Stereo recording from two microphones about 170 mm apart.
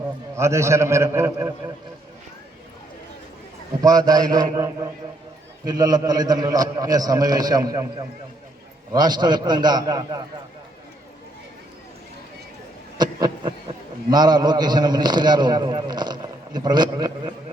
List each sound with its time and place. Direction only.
0.3 s a man's voice: 15° right (ahead or behind)
3.8 s a man's voice: 20° right (ahead or behind)
13.0 s a man's voice: 25° right (ahead or behind)